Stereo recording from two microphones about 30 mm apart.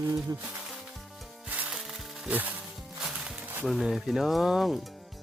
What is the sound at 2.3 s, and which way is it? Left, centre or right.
Music, right.